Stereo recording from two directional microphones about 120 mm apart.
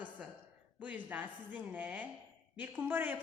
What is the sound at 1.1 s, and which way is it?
A woman's voice, 15° right (ahead or behind).